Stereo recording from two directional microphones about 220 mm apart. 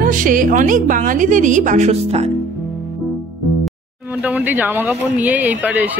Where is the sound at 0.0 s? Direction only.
40° right (ahead or behind).